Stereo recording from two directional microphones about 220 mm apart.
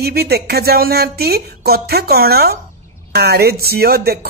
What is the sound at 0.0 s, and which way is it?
Speech, 45° right (ahead or behind).